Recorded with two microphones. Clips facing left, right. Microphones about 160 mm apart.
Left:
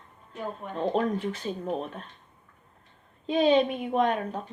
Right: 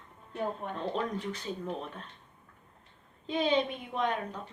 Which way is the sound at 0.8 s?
50° left (ahead or behind).